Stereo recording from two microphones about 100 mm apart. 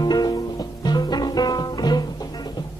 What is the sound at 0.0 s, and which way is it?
Music, 45° left (ahead or behind).